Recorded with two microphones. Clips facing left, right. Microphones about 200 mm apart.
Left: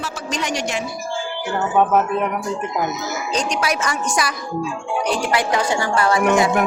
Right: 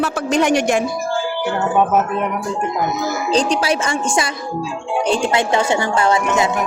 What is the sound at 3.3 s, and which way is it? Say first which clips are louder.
Speech: right 5 dB; 30° right (ahead or behind).